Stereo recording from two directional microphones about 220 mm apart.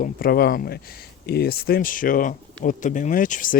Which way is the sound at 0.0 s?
40° left (ahead or behind).